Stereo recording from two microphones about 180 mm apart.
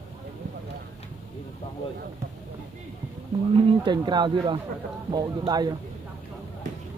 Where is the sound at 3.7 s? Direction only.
25° right (ahead or behind).